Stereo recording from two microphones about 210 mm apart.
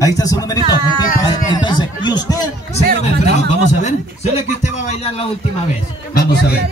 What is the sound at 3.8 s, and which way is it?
Speech, 35° left (ahead or behind).